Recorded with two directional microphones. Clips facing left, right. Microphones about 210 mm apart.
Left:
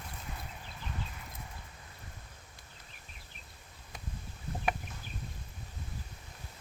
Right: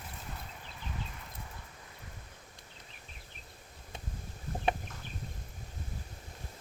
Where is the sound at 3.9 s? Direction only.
25° right (ahead or behind).